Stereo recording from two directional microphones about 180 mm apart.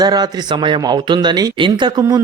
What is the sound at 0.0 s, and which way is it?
Speech, 20° right (ahead or behind).